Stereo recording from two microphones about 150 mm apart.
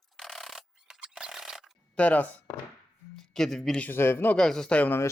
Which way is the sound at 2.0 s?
10° left (ahead or behind).